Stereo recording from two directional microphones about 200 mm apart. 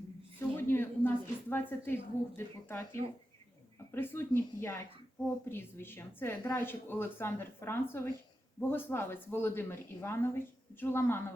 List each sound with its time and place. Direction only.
0.3 s speech: 10° left (ahead or behind)